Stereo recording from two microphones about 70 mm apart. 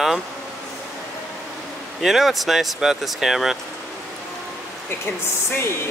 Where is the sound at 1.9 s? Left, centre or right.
Centre.